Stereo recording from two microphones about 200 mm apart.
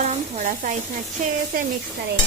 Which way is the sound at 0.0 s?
35° right (ahead or behind).